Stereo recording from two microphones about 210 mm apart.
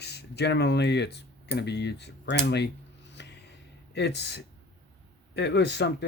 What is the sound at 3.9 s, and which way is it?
Speech, 55° left (ahead or behind).